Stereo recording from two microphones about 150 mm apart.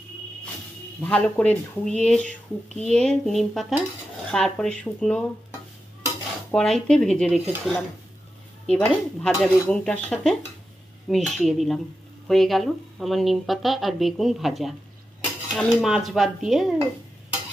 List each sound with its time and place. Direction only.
1.0 s speech: 10° left (ahead or behind)
6.5 s speech: 5° left (ahead or behind)